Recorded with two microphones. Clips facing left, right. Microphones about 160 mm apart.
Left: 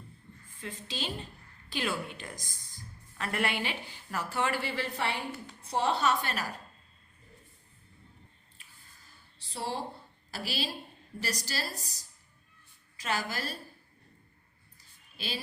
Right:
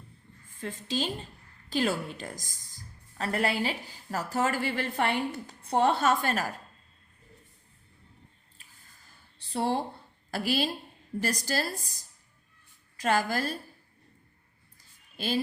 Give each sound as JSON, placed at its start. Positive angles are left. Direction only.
{"t": 0.6, "sound": "a woman's voice", "side_deg": -45}
{"t": 9.5, "sound": "a woman's voice", "side_deg": -55}